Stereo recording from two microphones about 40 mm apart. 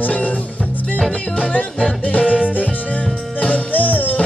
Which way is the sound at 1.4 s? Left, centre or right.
Left.